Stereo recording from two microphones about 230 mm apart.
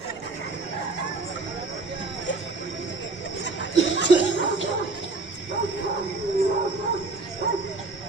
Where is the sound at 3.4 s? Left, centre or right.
Left.